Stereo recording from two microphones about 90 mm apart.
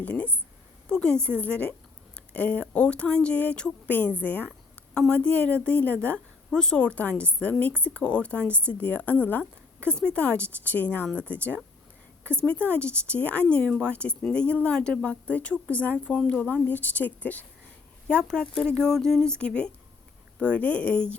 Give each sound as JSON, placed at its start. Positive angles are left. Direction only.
{"t": 0.0, "sound": "speech", "side_deg": 15}
{"t": 6.5, "sound": "speech", "side_deg": 5}